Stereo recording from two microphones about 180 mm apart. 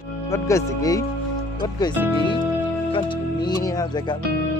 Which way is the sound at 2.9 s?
25° left (ahead or behind).